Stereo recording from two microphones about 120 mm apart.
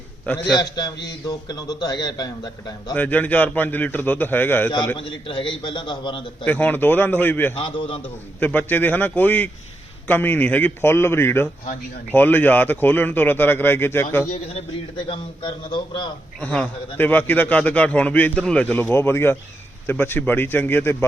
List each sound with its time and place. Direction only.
0.3 s a man's voice: 35° left (ahead or behind)
2.9 s a man's voice: 15° left (ahead or behind)
4.9 s a man's voice: 45° left (ahead or behind)
6.4 s a man's voice: 15° left (ahead or behind)
7.5 s a man's voice: 50° left (ahead or behind)
8.0 s a man's voice: 15° left (ahead or behind)
14.9 s a man's voice: 45° left (ahead or behind)
16.4 s a man's voice: 10° left (ahead or behind)